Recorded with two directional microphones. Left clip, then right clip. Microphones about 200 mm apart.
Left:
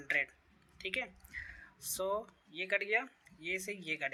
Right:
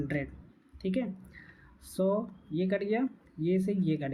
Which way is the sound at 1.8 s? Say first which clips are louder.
Right 6 dB; 15° left (ahead or behind).